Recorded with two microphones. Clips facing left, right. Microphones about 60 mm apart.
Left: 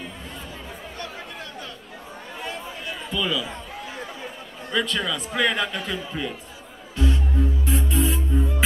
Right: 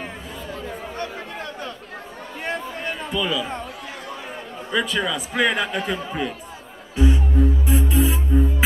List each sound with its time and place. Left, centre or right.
2.4 s a sound: right
3.1 s a man's voice: centre
4.6 s a man's voice: centre
7.0 s music: centre